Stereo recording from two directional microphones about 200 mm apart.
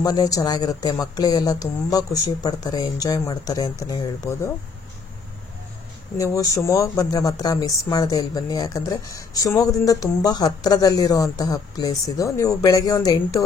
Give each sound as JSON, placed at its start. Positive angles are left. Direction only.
{"t": 0.0, "sound": "speech", "side_deg": 20}
{"t": 6.1, "sound": "speech", "side_deg": 15}